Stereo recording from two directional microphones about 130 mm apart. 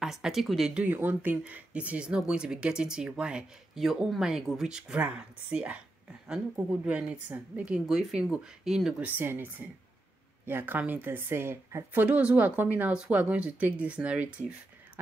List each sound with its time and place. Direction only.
0.0 s speech: 5° right (ahead or behind)
9.2 s speech: 15° right (ahead or behind)